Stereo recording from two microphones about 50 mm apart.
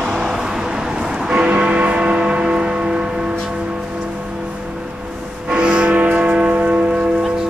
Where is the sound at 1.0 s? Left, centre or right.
Centre.